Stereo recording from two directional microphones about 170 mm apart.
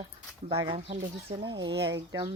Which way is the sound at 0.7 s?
35° right (ahead or behind).